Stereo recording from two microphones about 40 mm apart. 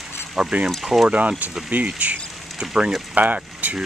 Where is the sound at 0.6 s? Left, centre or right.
Centre.